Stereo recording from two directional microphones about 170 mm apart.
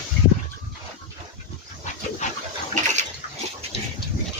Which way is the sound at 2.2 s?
45° left (ahead or behind).